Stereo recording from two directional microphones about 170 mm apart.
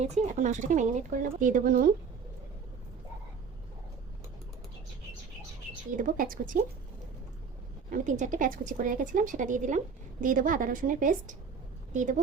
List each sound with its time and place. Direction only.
0.0 s speech: 45° right (ahead or behind)
5.9 s speech: 50° right (ahead or behind)
7.9 s speech: 50° right (ahead or behind)